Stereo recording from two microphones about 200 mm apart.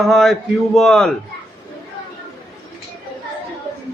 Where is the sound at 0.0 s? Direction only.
Centre (ahead or behind).